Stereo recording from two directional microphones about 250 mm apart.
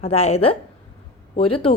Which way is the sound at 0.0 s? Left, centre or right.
Left.